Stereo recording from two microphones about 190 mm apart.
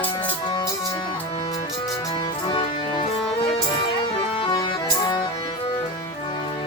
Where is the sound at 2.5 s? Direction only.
30° left (ahead or behind).